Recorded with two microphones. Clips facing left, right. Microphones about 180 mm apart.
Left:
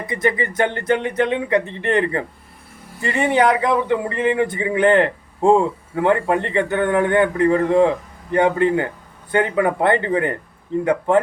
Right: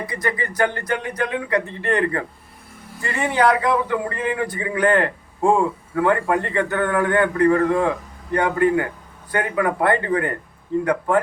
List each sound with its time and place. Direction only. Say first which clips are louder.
0.1 s a man's voice: left 5 dB; 20° left (ahead or behind)